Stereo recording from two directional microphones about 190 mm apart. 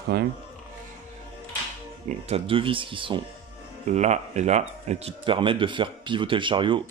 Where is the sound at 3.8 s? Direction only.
35° right (ahead or behind).